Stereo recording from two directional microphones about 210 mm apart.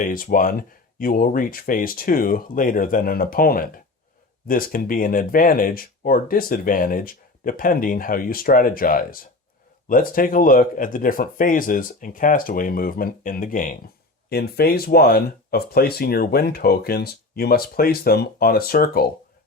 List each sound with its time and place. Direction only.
0.0 s speech: 40° left (ahead or behind)